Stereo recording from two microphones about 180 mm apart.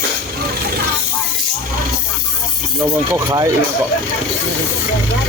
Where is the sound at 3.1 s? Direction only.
20° right (ahead or behind).